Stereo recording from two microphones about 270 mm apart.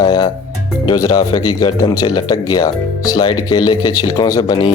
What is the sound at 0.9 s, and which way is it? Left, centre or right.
Speech, centre.